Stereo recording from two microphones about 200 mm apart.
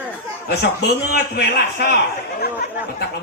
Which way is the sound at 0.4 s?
55° left (ahead or behind).